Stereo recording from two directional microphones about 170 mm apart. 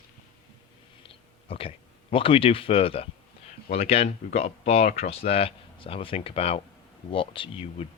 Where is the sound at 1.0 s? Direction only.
30° left (ahead or behind).